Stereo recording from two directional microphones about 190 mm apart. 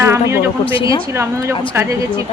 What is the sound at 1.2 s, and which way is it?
Speech, 15° right (ahead or behind).